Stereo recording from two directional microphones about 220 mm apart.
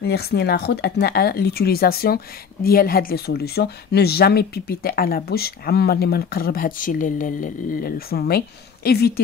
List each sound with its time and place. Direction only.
0.0 s speech: 45° left (ahead or behind)